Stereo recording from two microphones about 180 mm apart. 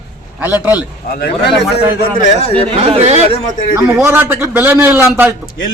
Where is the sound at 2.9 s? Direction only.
35° right (ahead or behind).